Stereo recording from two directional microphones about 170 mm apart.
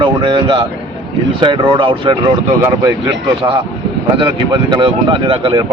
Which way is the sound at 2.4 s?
10° right (ahead or behind).